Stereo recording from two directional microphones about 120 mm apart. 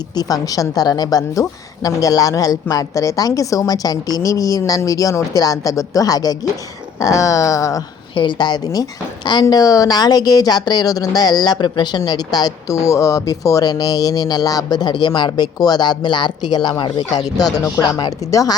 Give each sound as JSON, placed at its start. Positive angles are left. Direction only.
{"t": 0.2, "sound": "a woman's voice", "side_deg": 30}
{"t": 8.1, "sound": "a woman's voice", "side_deg": 40}